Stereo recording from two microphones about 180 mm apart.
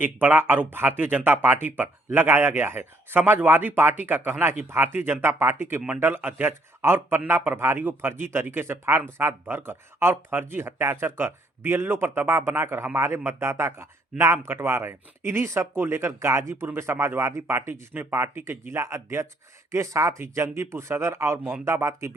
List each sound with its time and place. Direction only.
0.0 s speech: 10° right (ahead or behind)